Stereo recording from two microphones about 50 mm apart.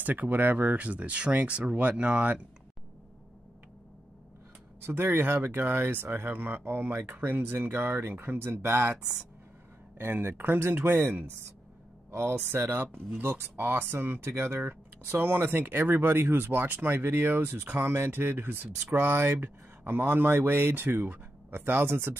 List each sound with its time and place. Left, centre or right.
0.0 s speech: right
4.8 s speech: right
9.9 s speech: right
12.4 s speech: right
14.6 s speech: right